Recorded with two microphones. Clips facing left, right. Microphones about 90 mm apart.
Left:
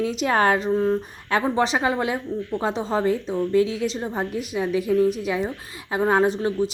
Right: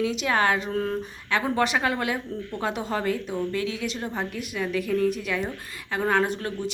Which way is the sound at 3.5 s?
35° left (ahead or behind).